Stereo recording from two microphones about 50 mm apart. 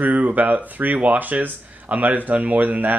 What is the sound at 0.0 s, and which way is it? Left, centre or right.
Speech, right.